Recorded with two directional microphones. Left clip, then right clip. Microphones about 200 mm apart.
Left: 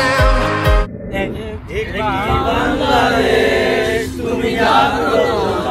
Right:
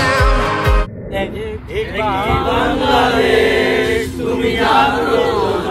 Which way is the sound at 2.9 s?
20° right (ahead or behind).